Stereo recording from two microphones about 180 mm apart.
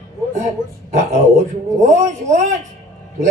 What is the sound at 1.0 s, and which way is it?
A man's voice, 45° right (ahead or behind).